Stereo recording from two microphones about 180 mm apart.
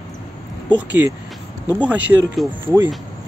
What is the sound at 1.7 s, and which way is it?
Speech, 10° right (ahead or behind).